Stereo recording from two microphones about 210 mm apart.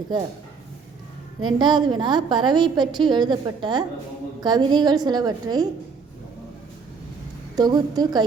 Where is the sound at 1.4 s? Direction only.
20° right (ahead or behind).